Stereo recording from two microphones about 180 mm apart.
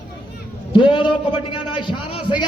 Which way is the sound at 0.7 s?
25° left (ahead or behind).